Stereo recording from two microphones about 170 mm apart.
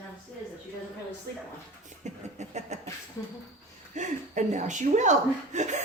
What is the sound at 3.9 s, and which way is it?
A woman's voice, 45° right (ahead or behind).